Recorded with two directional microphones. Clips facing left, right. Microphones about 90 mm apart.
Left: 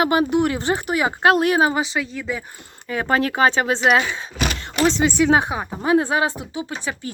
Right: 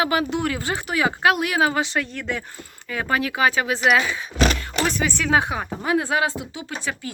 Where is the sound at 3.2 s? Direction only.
40° left (ahead or behind).